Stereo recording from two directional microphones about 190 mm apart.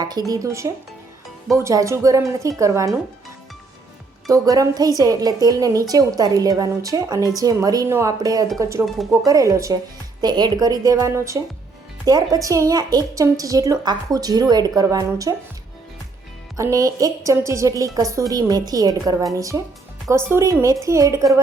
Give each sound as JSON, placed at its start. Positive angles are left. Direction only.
{"t": 0.0, "sound": "a woman's voice", "side_deg": -20}
{"t": 4.3, "sound": "a woman's voice", "side_deg": -20}
{"t": 16.6, "sound": "a woman's voice", "side_deg": -15}